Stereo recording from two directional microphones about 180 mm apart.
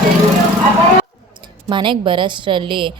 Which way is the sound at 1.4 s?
25° right (ahead or behind).